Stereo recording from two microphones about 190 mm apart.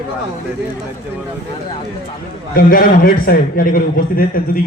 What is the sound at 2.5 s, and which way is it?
A man's voice, 50° left (ahead or behind).